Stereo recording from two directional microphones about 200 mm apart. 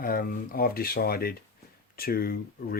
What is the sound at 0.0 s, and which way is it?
Speech, 45° left (ahead or behind).